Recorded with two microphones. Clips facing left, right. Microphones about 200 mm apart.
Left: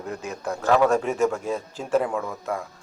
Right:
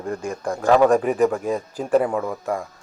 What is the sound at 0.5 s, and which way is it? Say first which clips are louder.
Speech: right 4 dB; 15° right (ahead or behind).